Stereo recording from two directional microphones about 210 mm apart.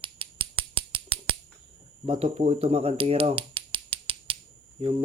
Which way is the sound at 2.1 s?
25° right (ahead or behind).